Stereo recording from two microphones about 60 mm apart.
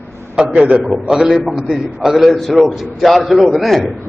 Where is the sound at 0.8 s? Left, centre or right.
Centre.